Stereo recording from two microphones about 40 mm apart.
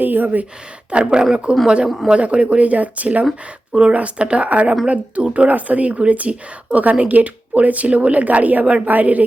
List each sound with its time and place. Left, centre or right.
0.0 s speech: right
0.9 s a woman's voice: right
3.7 s a woman's voice: right